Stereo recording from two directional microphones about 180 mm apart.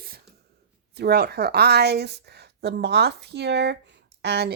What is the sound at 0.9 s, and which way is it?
Speech, 65° right (ahead or behind).